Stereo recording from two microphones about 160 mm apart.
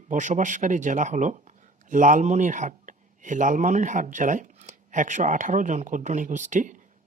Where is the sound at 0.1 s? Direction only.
50° right (ahead or behind).